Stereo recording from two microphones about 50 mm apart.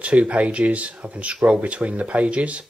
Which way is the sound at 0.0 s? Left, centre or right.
Right.